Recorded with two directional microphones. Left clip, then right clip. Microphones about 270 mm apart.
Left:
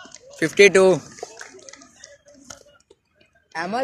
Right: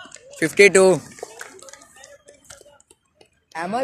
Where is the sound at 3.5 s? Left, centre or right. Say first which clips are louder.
Even; centre.